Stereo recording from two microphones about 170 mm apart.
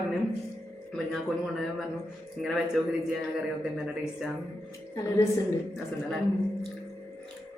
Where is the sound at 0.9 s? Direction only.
Centre (ahead or behind).